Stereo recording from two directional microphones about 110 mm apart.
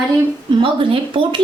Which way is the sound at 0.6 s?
50° right (ahead or behind).